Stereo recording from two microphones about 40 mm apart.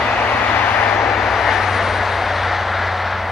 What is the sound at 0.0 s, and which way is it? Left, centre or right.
Vehicle, centre.